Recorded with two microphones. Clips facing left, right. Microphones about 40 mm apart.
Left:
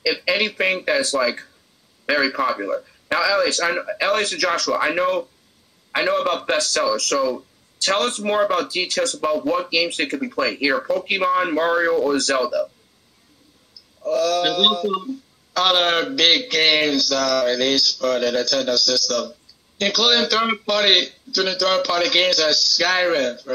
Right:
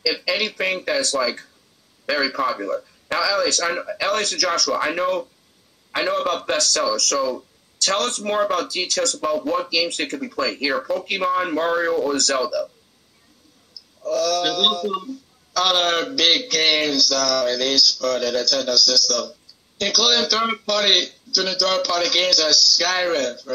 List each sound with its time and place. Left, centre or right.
0.3 s speech: centre
4.6 s speech: centre
9.1 s speech: centre
9.7 s speech: centre
12.2 s speech: centre
14.0 s speech: centre